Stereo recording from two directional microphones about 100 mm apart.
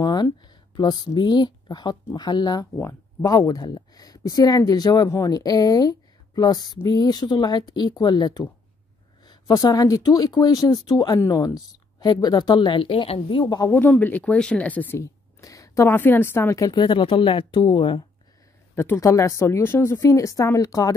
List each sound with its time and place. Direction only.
0.0 s speech: 45° left (ahead or behind)
2.8 s speech: 30° left (ahead or behind); by 13.7 s 45° left (ahead or behind)
13.7 s speech: 20° left (ahead or behind)
15.0 s a woman's voice: 35° left (ahead or behind)
16.7 s speech: 55° left (ahead or behind)
18.9 s a woman's voice: 30° left (ahead or behind)